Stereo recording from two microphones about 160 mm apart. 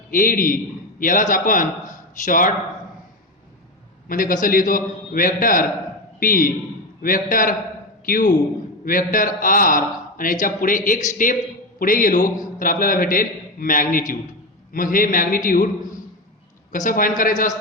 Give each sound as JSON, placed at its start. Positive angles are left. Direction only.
{"t": 0.1, "sound": "a man's voice", "side_deg": 60}
{"t": 4.1, "sound": "a man's voice", "side_deg": 60}